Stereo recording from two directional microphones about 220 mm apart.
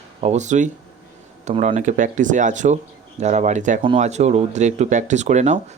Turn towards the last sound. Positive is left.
turn(degrees=-30)  # may be behind; listen again after turning